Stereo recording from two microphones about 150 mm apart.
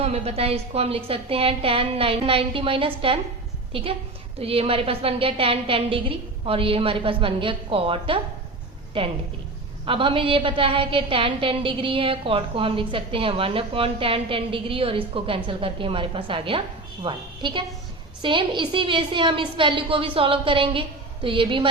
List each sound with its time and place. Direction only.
0.0 s a woman's voice: 45° right (ahead or behind)